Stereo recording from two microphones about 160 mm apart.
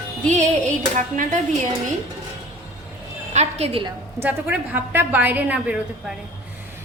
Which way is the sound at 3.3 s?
40° right (ahead or behind).